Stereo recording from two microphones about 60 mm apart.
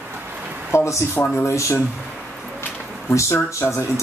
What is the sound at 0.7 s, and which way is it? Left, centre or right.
Speech, left.